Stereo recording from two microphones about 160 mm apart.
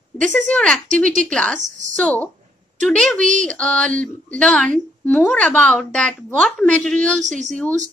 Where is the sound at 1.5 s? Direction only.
50° right (ahead or behind).